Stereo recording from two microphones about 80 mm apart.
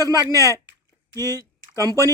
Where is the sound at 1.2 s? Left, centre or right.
Left.